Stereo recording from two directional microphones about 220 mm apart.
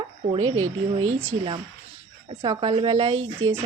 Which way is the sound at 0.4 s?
75° right (ahead or behind).